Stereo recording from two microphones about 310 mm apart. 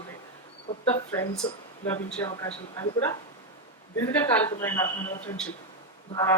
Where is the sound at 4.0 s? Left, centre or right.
Centre.